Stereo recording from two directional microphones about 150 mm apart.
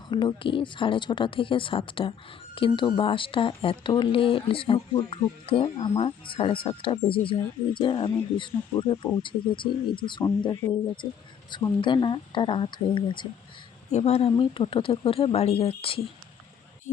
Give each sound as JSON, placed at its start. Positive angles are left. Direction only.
{"t": 0.1, "sound": "speech", "side_deg": 30}
{"t": 13.9, "sound": "speech", "side_deg": 45}